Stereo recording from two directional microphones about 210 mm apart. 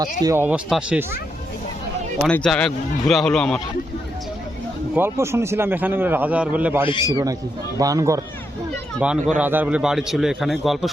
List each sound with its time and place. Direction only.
0.0 s a man's voice: 15° right (ahead or behind)
2.2 s a man's voice: 5° left (ahead or behind)
4.9 s a man's voice: 10° right (ahead or behind)
9.0 s a man's voice: 5° right (ahead or behind)